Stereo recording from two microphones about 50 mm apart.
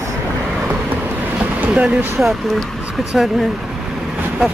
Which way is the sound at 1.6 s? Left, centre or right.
Right.